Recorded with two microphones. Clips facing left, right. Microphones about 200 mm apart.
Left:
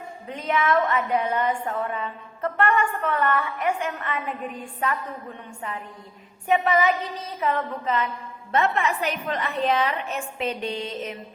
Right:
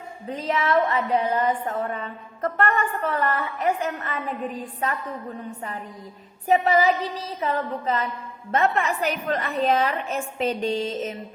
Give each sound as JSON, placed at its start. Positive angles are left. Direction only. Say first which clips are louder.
{"t": 0.3, "sound": "a woman's voice", "louder": "even", "side_deg": -30}
{"t": 6.5, "sound": "a woman's voice", "louder": "right 2 dB", "side_deg": -30}